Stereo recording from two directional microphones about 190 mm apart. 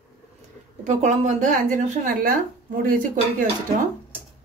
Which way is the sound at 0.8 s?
40° right (ahead or behind).